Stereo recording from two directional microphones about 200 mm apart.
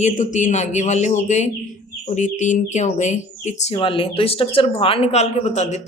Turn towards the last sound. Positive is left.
turn(degrees=35)  # may be behind; listen again after turning